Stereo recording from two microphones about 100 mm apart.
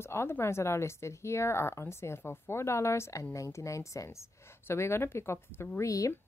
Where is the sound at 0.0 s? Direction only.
25° left (ahead or behind).